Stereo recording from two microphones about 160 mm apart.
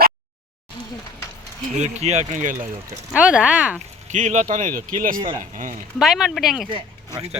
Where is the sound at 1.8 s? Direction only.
45° right (ahead or behind).